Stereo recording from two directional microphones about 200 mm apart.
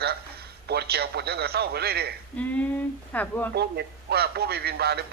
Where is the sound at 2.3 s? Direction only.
5° left (ahead or behind).